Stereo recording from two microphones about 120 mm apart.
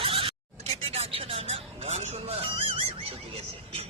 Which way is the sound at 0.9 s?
55° right (ahead or behind).